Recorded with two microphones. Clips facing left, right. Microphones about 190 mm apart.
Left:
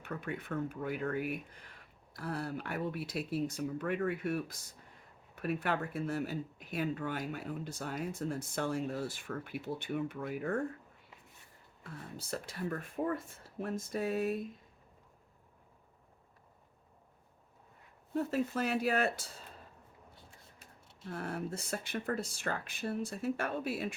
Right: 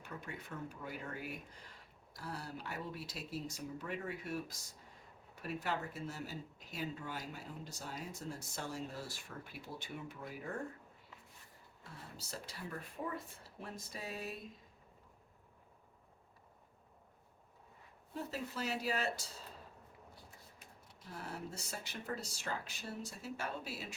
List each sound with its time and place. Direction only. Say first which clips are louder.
0.0 s speech: left 8 dB; 60° left (ahead or behind)
11.8 s speech: left 7 dB; 55° left (ahead or behind)
18.1 s speech: left 10 dB; 55° left (ahead or behind)
21.1 s speech: left 7 dB; 55° left (ahead or behind)